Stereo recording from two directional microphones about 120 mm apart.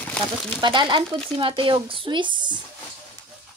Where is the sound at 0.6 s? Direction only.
40° right (ahead or behind).